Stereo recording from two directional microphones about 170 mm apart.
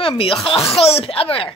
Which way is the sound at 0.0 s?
30° left (ahead or behind).